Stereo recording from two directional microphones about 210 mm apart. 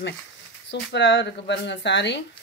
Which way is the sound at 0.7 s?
55° left (ahead or behind).